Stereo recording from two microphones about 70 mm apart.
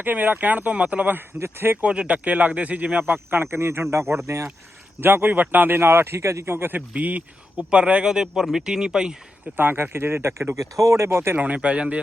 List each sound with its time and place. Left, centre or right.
0.0 s speech: right
1.4 s a man's voice: right
1.8 s speech: centre
3.0 s a man's voice: right
4.9 s a man's voice: right
6.9 s speech: right
9.6 s a man's voice: right
10.6 s speech: right
11.3 s speech: centre